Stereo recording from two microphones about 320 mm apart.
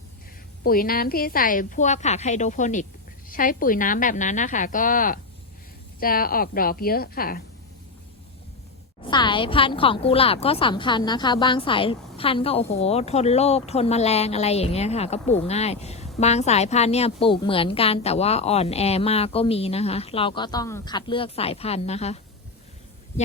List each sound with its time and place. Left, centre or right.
0.6 s a woman's voice: left
9.0 s a woman's voice: centre